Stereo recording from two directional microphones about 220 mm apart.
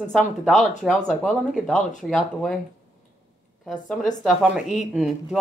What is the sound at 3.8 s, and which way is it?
Speech, centre (ahead or behind).